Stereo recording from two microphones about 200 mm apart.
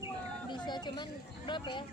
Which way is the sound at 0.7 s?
20° left (ahead or behind).